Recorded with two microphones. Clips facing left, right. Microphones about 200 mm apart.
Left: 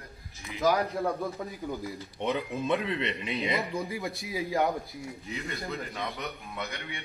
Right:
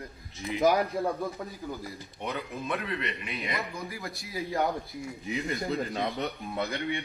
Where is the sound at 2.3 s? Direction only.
15° left (ahead or behind).